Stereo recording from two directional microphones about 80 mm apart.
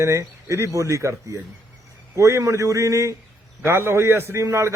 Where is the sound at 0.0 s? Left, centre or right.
Right.